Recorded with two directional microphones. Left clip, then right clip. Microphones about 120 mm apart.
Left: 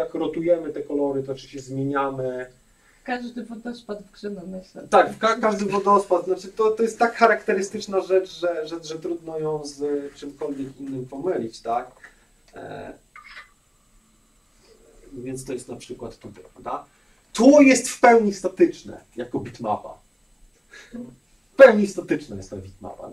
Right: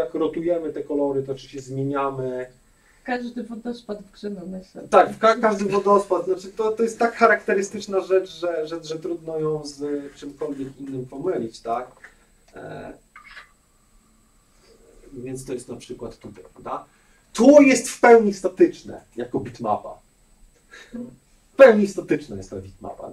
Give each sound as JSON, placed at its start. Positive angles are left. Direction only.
{"t": 0.1, "sound": "speech", "side_deg": 30}
{"t": 3.0, "sound": "speech", "side_deg": 15}
{"t": 15.2, "sound": "speech", "side_deg": 30}
{"t": 21.5, "sound": "speech", "side_deg": 25}
{"t": 22.8, "sound": "speech", "side_deg": 45}